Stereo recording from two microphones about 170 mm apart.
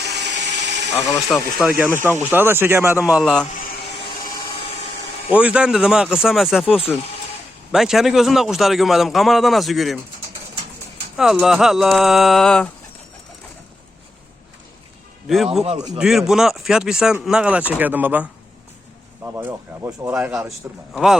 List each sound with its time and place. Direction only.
0.0 s a sound: 90° right
0.9 s speech: 20° left (ahead or behind)
1.3 s speech: centre (ahead or behind)
5.3 s a man's voice: 10° right (ahead or behind)
11.2 s a man's voice: centre (ahead or behind)
16.0 s a man's voice: 5° right (ahead or behind)